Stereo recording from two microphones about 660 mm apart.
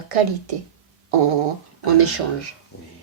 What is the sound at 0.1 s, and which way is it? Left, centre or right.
Speech, right.